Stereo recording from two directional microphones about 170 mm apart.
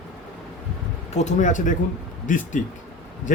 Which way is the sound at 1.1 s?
45° left (ahead or behind).